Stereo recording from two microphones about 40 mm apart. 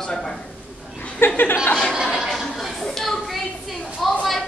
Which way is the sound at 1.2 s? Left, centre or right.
Left.